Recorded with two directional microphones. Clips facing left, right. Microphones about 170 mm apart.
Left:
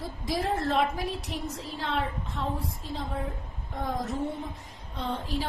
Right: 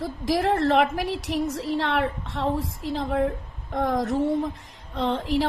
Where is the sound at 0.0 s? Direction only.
90° right.